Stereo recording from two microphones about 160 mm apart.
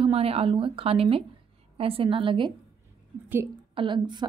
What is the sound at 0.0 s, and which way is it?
A woman's voice, 40° right (ahead or behind).